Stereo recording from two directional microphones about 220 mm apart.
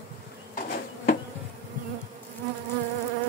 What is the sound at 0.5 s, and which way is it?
Bee, 40° left (ahead or behind).